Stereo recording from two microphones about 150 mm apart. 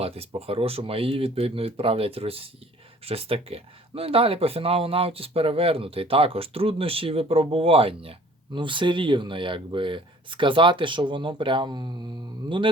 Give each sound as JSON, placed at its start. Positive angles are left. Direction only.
{"t": 0.0, "sound": "speech", "side_deg": -40}